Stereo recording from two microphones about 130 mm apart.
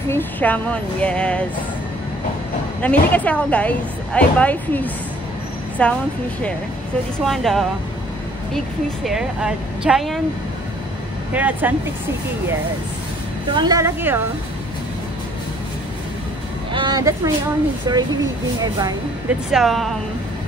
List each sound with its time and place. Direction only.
0.1 s speech: 10° left (ahead or behind)
2.8 s speech: 10° left (ahead or behind)
7.2 s speech: centre (ahead or behind)
9.0 s speech: 5° right (ahead or behind)
11.3 s speech: 15° right (ahead or behind)
13.5 s speech: 35° right (ahead or behind)
16.7 s speech: 35° right (ahead or behind)
19.5 s speech: centre (ahead or behind)